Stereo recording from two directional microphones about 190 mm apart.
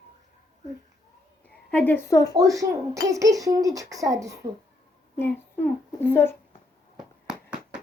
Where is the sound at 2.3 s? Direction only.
20° right (ahead or behind).